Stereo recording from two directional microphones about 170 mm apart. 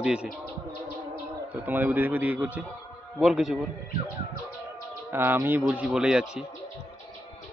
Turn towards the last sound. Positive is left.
turn(degrees=-5)  # may be behind; listen again after turning